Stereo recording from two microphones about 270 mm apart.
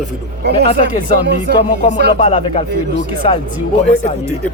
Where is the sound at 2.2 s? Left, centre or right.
Left.